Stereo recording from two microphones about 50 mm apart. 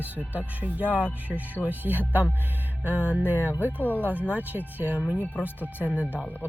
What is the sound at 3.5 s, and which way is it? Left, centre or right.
Speech, left.